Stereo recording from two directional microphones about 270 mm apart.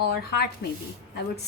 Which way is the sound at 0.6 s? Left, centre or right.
Left.